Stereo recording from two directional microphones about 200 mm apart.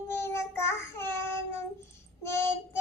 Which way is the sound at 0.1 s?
15° left (ahead or behind).